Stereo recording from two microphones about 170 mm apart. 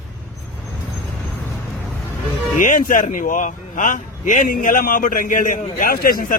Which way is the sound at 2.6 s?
50° left (ahead or behind).